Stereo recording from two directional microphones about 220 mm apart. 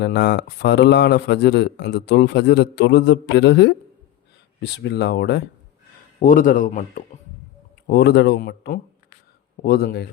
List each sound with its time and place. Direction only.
0.0 s speech: 50° left (ahead or behind)
6.2 s speech: 40° left (ahead or behind)
7.9 s speech: 50° left (ahead or behind)